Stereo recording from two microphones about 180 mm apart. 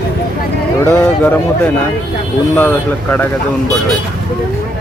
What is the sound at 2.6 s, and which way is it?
Speech, 10° left (ahead or behind).